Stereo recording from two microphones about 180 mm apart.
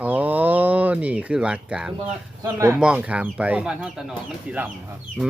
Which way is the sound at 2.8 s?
5° right (ahead or behind).